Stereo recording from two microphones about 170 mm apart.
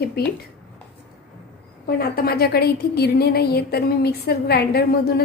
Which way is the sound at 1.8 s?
65° left (ahead or behind).